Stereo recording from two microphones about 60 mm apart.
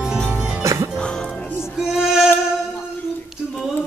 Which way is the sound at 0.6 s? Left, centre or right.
Right.